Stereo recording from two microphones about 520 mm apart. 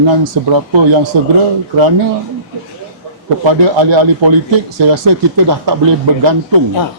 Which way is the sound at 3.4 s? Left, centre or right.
Right.